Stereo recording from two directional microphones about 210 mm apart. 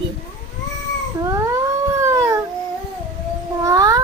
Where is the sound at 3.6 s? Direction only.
15° right (ahead or behind).